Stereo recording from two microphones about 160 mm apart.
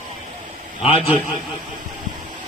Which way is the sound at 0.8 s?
35° left (ahead or behind).